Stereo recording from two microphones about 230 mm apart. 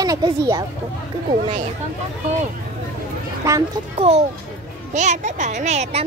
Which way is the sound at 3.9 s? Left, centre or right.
Right.